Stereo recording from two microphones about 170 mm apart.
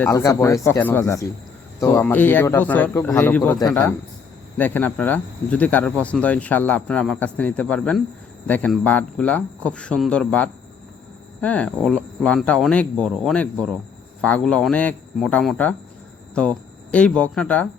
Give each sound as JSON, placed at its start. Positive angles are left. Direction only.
{"t": 0.0, "sound": "speech", "side_deg": 20}